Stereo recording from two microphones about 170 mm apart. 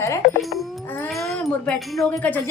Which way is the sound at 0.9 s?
10° left (ahead or behind).